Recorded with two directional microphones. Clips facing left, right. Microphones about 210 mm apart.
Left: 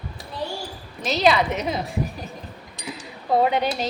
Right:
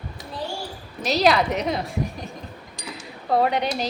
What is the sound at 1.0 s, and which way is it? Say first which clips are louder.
Speech: even; centre (ahead or behind).